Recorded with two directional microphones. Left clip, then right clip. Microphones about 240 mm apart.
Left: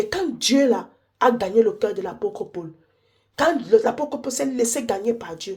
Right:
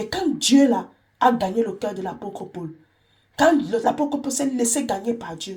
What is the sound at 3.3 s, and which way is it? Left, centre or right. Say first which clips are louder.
Speech: left 1 dB; left.